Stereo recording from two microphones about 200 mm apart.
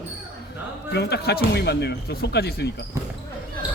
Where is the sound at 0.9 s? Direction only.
55° left (ahead or behind).